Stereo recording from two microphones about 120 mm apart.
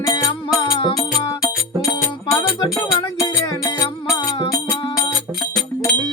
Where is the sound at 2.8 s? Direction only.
25° left (ahead or behind).